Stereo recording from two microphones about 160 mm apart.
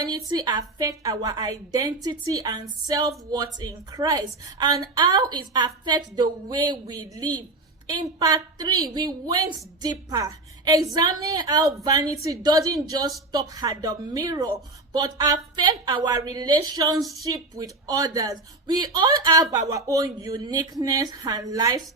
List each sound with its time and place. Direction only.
0.3 s a woman's voice: 25° right (ahead or behind)